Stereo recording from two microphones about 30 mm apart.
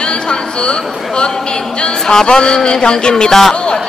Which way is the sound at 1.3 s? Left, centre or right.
Left.